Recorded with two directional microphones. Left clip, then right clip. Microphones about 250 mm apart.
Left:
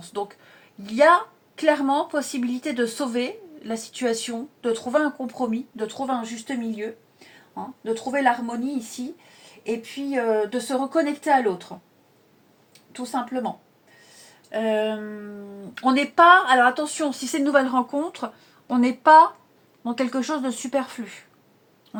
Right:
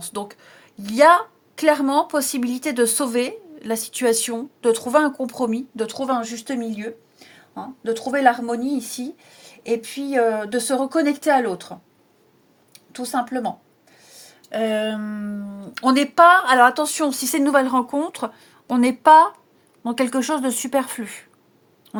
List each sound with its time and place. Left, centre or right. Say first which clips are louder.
0.0 s a woman's voice: even; right
7.5 s a woman's voice: right 3 dB; right
9.6 s a woman's voice: right 4 dB; right
12.9 s a woman's voice: right 4 dB; right
14.5 s a woman's voice: right 1 dB; right